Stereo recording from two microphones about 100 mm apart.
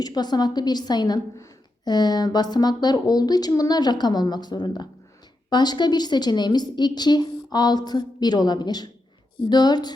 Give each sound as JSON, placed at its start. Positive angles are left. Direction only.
{"t": 0.0, "sound": "a woman's voice", "side_deg": 45}